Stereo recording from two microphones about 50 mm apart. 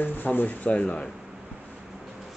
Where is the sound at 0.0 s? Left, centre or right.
Left.